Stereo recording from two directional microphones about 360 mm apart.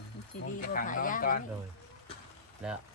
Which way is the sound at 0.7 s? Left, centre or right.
Left.